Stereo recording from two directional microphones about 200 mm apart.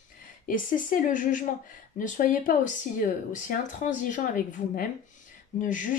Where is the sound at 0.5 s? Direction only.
40° left (ahead or behind).